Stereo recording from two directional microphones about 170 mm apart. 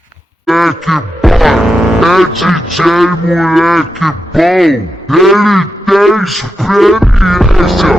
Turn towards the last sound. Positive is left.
turn(degrees=0)  # may be behind; listen again after turning